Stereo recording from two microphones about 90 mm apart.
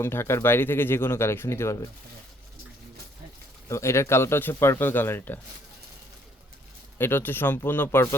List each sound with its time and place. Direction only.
0.0 s speech: 30° left (ahead or behind)
3.7 s speech: 30° left (ahead or behind)
7.0 s speech: 25° left (ahead or behind)